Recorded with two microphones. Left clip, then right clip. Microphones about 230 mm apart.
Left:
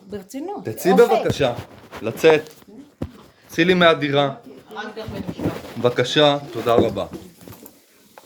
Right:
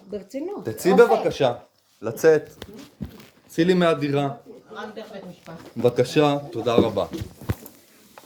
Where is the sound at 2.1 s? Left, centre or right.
Left.